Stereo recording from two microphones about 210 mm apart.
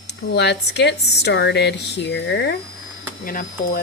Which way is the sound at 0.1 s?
55° left (ahead or behind).